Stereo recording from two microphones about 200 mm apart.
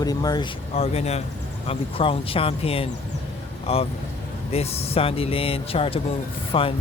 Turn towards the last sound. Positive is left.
turn(degrees=25)  # may be behind; listen again after turning